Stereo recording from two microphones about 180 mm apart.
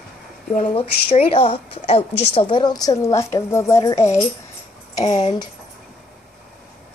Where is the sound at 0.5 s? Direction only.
45° left (ahead or behind).